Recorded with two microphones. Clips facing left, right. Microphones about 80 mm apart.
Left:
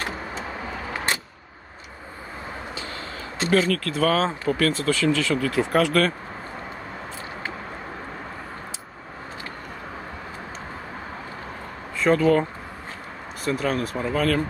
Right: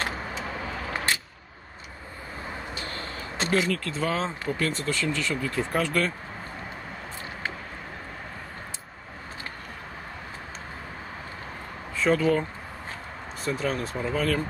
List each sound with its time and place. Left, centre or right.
3.4 s speech: centre
3.9 s speech: left
12.0 s speech: centre
13.4 s speech: centre